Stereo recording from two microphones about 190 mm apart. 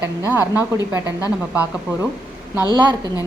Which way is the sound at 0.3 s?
20° left (ahead or behind).